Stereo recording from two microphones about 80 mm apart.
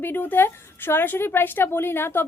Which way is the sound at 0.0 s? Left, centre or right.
Left.